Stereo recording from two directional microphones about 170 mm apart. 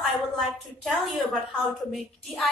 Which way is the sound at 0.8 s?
Centre (ahead or behind).